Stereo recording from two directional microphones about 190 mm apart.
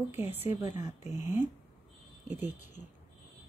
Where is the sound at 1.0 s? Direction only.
10° right (ahead or behind).